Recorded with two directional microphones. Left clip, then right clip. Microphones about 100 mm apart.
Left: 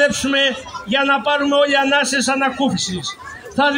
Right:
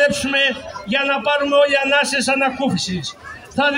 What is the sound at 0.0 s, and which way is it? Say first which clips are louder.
A man's voice: even; 50° right (ahead or behind).